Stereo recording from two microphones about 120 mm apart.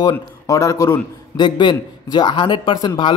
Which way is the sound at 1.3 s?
40° left (ahead or behind).